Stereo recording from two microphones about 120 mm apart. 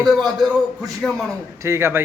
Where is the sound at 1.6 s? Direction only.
20° right (ahead or behind).